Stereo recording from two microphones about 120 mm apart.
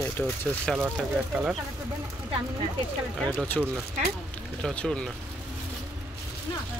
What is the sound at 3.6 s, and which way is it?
Speech, 10° left (ahead or behind).